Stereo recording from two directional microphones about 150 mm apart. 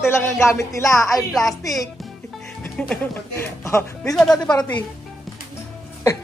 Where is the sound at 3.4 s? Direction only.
20° left (ahead or behind).